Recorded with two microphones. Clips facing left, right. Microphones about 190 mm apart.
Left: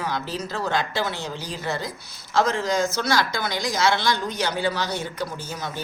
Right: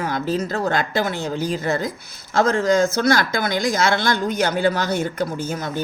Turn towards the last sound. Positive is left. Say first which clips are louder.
# right 7 dB
turn(degrees=-50)  # may be behind; listen again after turning